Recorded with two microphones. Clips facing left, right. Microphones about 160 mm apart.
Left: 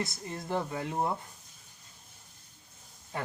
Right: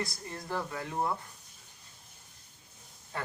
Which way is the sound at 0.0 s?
20° left (ahead or behind).